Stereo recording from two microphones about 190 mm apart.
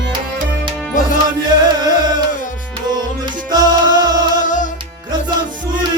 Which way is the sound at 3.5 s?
20° right (ahead or behind).